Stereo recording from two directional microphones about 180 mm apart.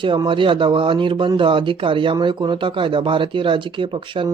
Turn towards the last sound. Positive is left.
turn(degrees=-30)  # may be behind; listen again after turning